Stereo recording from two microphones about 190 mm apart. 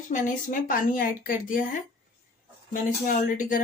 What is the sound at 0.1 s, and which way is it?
A woman's voice, 45° left (ahead or behind).